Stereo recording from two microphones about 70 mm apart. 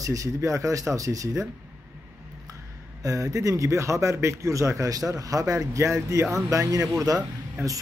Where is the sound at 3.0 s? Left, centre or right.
Right.